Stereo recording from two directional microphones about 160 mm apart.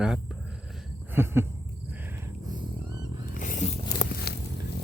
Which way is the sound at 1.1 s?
15° right (ahead or behind).